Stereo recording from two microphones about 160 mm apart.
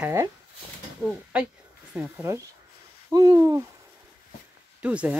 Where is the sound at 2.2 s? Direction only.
20° right (ahead or behind).